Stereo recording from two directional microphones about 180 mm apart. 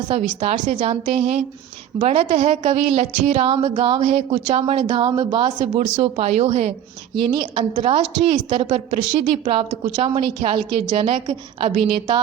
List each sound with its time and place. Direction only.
0.2 s a woman's voice: 45° right (ahead or behind); by 5.5 s 25° right (ahead or behind)
5.5 s a woman's voice: 45° right (ahead or behind)
7.3 s a woman's voice: 25° right (ahead or behind)